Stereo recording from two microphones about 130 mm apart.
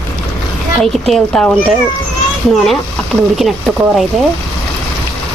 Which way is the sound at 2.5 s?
Centre (ahead or behind).